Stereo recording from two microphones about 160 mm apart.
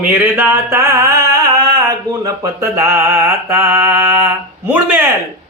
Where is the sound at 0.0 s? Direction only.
10° right (ahead or behind).